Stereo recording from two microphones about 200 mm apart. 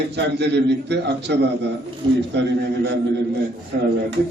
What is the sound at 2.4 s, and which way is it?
Speech, 60° right (ahead or behind).